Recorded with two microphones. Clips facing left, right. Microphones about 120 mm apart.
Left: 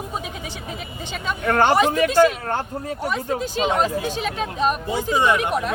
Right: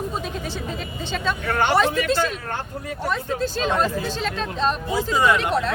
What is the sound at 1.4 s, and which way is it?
Speech, 45° left (ahead or behind).